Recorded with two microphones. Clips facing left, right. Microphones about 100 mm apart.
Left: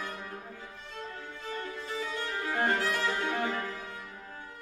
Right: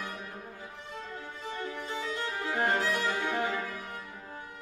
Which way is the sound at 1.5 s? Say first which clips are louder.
Right 1 dB; 20° right (ahead or behind).